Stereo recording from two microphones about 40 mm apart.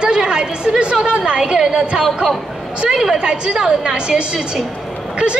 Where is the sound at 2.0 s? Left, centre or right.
Centre.